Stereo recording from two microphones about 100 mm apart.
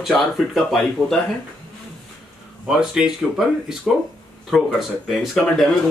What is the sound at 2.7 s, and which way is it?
Speech, 5° right (ahead or behind).